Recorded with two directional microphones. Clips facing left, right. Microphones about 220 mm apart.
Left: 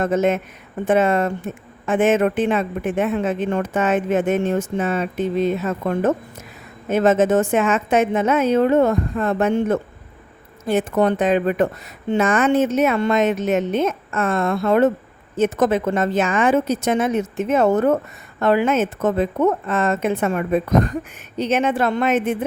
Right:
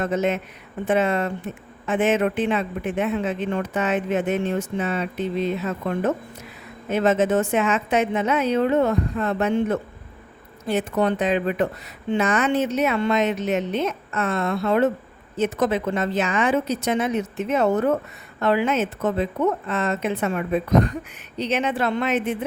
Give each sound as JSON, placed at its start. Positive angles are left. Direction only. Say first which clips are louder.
{"t": 0.0, "sound": "speech", "louder": "left 4 dB", "side_deg": 50}